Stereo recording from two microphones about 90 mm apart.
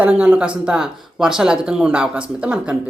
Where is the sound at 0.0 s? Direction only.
15° right (ahead or behind).